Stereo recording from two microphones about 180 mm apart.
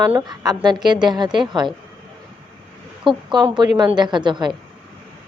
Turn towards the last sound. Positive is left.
turn(degrees=-25)  # may be behind; listen again after turning